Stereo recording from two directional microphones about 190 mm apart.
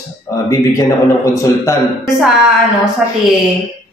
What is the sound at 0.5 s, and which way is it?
Speech, 15° left (ahead or behind).